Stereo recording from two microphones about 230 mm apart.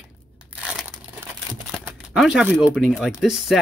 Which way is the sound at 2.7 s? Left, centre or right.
Centre.